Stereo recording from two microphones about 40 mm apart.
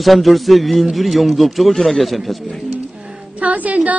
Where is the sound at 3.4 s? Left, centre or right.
Right.